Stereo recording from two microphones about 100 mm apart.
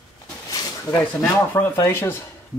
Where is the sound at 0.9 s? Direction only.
15° left (ahead or behind).